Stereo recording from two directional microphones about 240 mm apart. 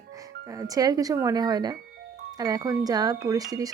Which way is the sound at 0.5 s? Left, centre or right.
Centre.